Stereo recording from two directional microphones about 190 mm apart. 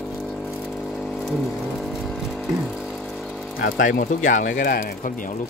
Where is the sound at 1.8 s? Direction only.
Centre (ahead or behind).